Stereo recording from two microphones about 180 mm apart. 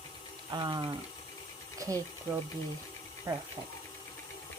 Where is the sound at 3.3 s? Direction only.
20° right (ahead or behind).